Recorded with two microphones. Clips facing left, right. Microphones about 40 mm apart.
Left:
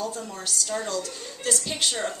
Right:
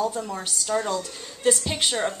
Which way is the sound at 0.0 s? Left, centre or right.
Right.